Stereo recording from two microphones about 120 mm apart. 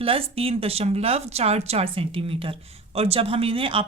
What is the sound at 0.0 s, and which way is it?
Speech, 50° right (ahead or behind).